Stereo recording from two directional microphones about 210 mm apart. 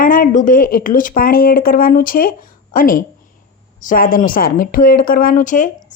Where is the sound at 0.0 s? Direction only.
40° left (ahead or behind).